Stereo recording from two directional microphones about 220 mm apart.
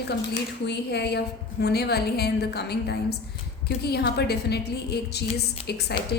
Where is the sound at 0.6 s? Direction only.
50° left (ahead or behind).